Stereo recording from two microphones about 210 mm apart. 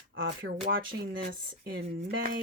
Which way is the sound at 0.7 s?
45° right (ahead or behind).